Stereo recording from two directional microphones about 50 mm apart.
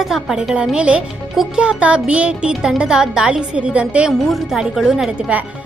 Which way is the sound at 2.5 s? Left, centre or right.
Centre.